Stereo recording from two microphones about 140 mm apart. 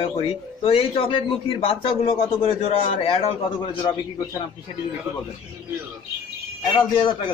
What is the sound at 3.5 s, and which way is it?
Speech, 30° left (ahead or behind).